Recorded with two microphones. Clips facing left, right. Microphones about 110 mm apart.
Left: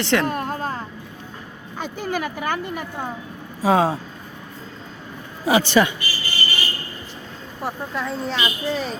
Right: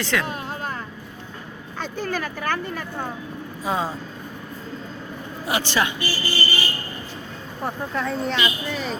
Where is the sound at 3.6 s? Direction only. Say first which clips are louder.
Left 8 dB; 90° left.